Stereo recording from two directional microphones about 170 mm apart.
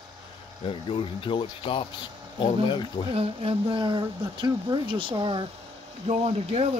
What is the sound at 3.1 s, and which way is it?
Speech, 35° right (ahead or behind).